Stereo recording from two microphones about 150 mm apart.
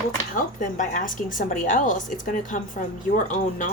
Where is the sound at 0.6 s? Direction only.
60° left (ahead or behind).